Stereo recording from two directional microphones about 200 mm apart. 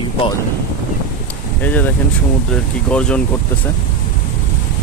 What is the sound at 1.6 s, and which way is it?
Speech, 10° left (ahead or behind).